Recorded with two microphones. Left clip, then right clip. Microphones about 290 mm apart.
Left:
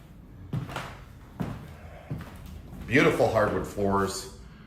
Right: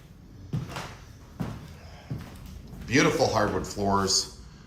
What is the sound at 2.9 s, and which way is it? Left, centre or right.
Speech, centre.